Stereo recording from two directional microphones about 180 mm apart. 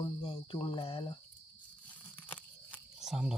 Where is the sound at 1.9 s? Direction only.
10° left (ahead or behind).